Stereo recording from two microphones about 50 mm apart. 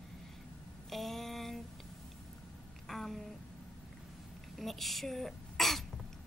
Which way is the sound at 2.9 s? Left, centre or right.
Centre.